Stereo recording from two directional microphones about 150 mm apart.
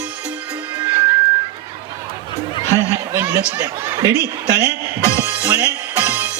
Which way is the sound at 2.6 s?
20° left (ahead or behind).